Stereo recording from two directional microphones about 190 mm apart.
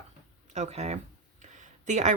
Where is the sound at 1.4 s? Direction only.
40° right (ahead or behind).